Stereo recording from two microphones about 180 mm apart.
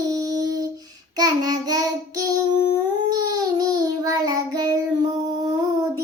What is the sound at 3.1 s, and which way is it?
Child singing, 20° right (ahead or behind).